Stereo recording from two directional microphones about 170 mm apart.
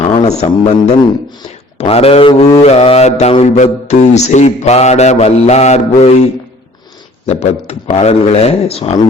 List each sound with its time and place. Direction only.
0.0 s a man's voice: 40° left (ahead or behind)
1.8 s mantra: 35° left (ahead or behind)
7.3 s mantra: 40° left (ahead or behind)